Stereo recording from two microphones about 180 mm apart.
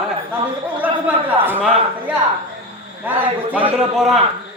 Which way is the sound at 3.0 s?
10° right (ahead or behind).